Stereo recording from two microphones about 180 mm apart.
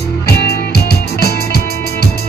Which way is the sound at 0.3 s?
60° left (ahead or behind).